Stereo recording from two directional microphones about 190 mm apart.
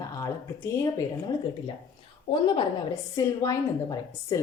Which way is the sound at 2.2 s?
25° left (ahead or behind).